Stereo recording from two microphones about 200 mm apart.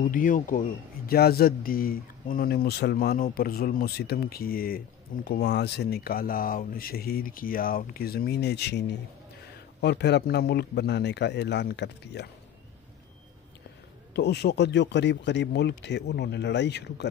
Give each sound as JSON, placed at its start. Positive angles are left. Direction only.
{"t": 0.0, "sound": "a man's voice", "side_deg": 45}
{"t": 14.1, "sound": "speech", "side_deg": 55}